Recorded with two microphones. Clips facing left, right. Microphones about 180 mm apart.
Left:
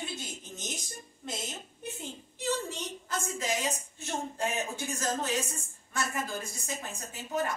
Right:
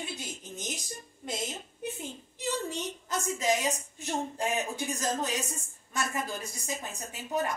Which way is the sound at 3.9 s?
15° right (ahead or behind).